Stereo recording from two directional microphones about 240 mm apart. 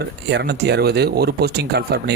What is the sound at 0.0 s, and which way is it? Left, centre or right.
Speech, right.